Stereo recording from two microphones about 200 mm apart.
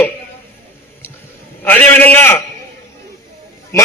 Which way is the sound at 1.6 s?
10° left (ahead or behind).